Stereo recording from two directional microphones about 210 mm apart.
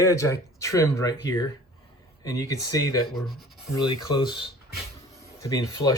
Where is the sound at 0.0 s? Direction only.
15° left (ahead or behind).